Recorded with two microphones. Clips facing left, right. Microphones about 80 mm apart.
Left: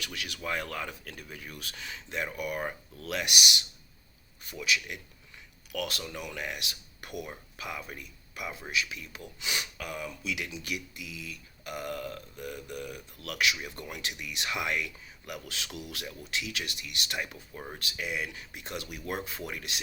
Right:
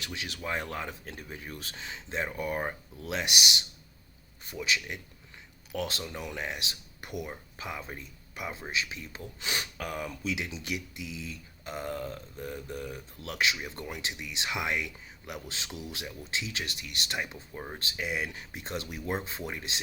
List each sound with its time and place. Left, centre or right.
0.0 s a man's voice: right
10.3 s speech: right